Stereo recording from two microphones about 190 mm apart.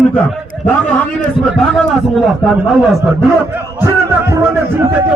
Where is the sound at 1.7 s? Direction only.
Centre (ahead or behind).